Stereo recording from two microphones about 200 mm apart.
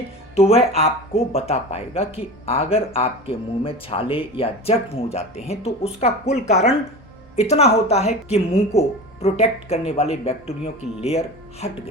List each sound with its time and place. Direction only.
0.3 s speech: 30° left (ahead or behind)